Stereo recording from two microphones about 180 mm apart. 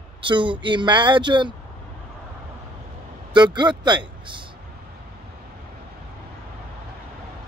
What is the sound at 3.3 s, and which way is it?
Speech, 25° right (ahead or behind).